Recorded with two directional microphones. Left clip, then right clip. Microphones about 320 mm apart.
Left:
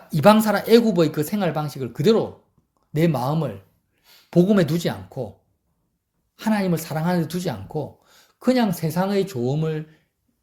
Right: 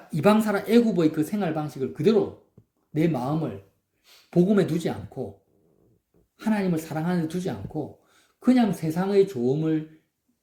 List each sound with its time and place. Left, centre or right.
0.1 s speech: left
6.3 s speech: left